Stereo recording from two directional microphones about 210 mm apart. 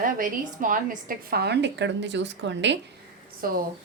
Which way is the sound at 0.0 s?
40° right (ahead or behind).